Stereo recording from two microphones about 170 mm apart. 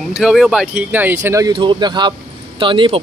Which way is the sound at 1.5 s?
30° right (ahead or behind).